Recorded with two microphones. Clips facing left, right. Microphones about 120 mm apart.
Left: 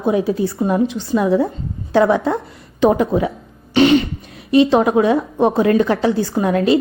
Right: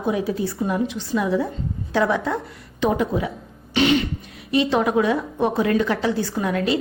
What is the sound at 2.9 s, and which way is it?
Speech, 40° left (ahead or behind).